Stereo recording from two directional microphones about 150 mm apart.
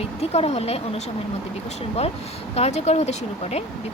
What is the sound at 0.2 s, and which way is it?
Speech, 45° left (ahead or behind).